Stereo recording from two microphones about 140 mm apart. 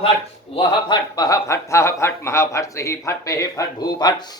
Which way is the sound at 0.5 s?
30° left (ahead or behind).